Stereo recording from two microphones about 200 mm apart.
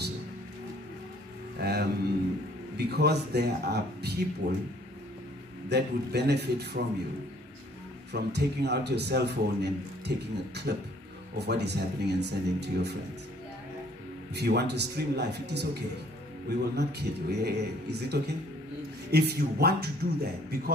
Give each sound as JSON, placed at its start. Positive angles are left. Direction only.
{"t": 1.6, "sound": "a sound", "side_deg": -50}
{"t": 2.8, "sound": "a man's voice", "side_deg": -55}
{"t": 5.7, "sound": "a man's voice", "side_deg": -55}
{"t": 8.1, "sound": "a man's voice", "side_deg": -55}
{"t": 14.3, "sound": "a man's voice", "side_deg": -55}